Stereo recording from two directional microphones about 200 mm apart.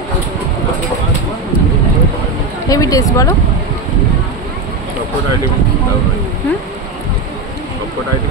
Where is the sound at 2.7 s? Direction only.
15° left (ahead or behind).